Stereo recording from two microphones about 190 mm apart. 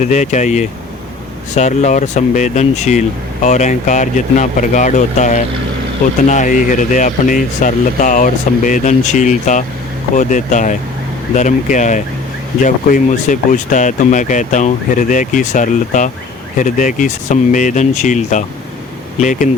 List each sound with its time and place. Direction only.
0.0 s speech: 40° left (ahead or behind)